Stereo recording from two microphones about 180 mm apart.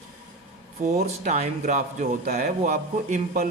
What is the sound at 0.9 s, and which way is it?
Speech, 45° right (ahead or behind).